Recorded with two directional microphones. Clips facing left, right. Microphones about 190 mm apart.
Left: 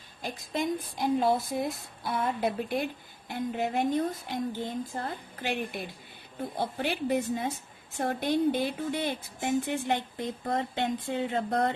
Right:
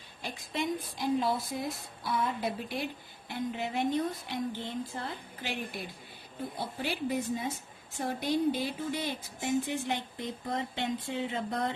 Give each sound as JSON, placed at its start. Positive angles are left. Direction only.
{"t": 0.2, "sound": "a woman's voice", "side_deg": 45}
{"t": 6.8, "sound": "speech", "side_deg": 55}